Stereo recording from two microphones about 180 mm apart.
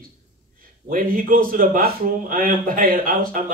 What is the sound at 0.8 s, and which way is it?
Speech, 50° right (ahead or behind).